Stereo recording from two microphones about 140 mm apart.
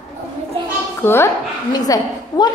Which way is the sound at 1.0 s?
15° left (ahead or behind).